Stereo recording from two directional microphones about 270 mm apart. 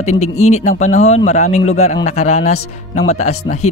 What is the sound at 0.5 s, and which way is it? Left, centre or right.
Speech, left.